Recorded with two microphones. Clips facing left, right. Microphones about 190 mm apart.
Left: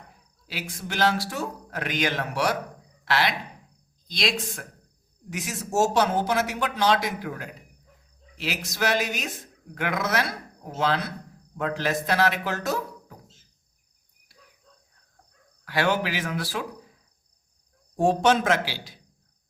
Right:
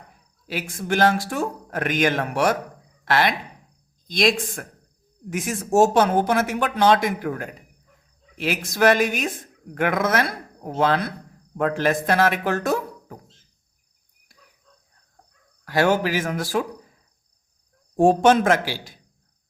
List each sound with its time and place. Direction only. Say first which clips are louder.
0.4 s speech: right 7 dB; 50° right (ahead or behind)
15.6 s speech: right 5 dB; 45° right (ahead or behind)
17.9 s speech: right 5 dB; 50° right (ahead or behind)